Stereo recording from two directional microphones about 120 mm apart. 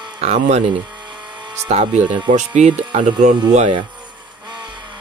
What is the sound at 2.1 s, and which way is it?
Speech, 40° right (ahead or behind).